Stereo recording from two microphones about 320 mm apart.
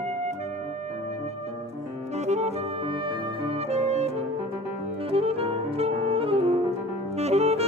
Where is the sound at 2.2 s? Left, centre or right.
Right.